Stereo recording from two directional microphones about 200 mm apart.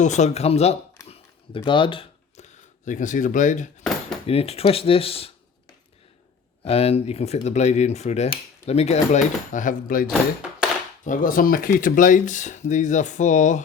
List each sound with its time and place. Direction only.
0.0 s speech: 35° left (ahead or behind)
1.0 s a sound: 30° left (ahead or behind)
4.3 s speech: 30° left (ahead or behind)
6.7 s speech: 30° left (ahead or behind)